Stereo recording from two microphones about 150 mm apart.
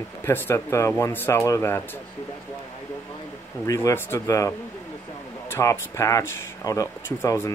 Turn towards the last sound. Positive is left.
turn(degrees=20)  # may be behind; listen again after turning